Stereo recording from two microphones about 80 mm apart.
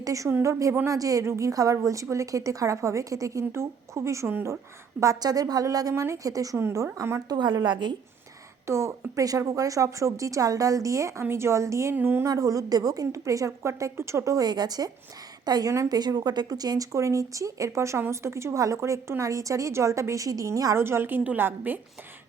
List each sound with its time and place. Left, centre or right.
0.0 s a woman's voice: right
4.9 s a woman's voice: right
6.6 s speech: right
7.3 s a woman's voice: right
8.6 s speech: right
11.9 s a woman's voice: right
12.2 s a woman's voice: right
14.4 s a woman's voice: right
15.7 s speech: right
16.0 s speech: right
20.7 s a woman's voice: right